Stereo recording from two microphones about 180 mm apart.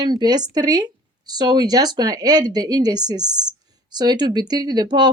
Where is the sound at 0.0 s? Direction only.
25° right (ahead or behind).